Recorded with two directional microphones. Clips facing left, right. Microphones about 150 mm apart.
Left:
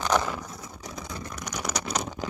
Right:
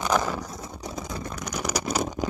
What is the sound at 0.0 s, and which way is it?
Vehicle, 10° right (ahead or behind).